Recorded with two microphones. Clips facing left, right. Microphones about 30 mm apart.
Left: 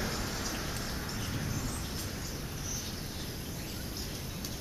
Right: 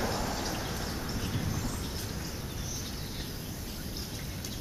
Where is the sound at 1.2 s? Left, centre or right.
Centre.